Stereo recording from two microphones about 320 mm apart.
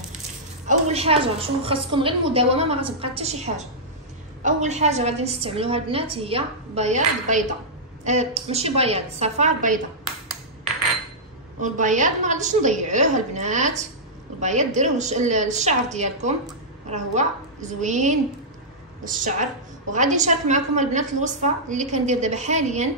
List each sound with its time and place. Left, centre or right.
0.7 s a woman's voice: centre
11.6 s a woman's voice: right